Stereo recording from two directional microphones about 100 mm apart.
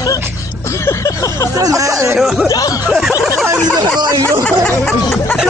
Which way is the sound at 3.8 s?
45° right (ahead or behind).